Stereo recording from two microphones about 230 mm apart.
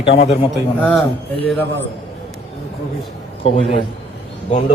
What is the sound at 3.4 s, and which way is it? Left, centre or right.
Speech, left.